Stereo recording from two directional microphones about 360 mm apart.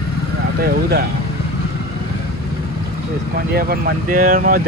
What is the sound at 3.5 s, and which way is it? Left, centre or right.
Speech, right.